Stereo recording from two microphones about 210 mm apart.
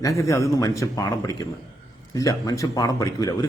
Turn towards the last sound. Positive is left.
turn(degrees=15)  # may be behind; listen again after turning